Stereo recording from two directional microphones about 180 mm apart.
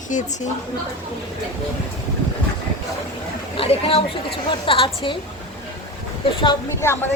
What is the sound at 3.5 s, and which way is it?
A woman's voice, 30° left (ahead or behind).